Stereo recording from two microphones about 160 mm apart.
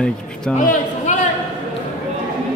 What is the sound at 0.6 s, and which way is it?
Speech, 55° left (ahead or behind).